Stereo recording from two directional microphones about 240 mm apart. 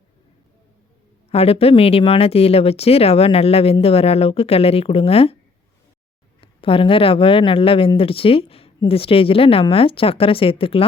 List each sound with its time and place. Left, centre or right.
1.3 s speech: left
6.4 s speech: left